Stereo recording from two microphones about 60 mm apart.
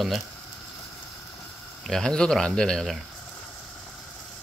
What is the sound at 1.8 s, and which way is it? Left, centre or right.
Speech, centre.